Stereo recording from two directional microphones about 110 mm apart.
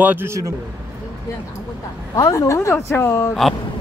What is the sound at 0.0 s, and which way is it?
Speech, 20° right (ahead or behind).